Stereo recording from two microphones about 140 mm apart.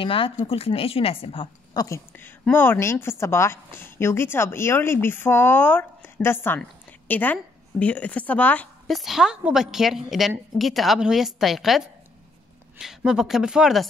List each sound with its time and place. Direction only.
0.0 s a woman's voice: 40° left (ahead or behind)
2.1 s a woman's voice: 15° left (ahead or behind)
8.8 s a woman's voice: centre (ahead or behind)